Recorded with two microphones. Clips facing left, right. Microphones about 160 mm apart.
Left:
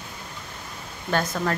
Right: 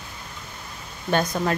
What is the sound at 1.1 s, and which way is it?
Speech, 20° right (ahead or behind).